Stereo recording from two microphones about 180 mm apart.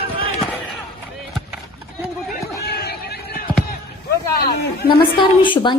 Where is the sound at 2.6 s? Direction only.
60° left (ahead or behind).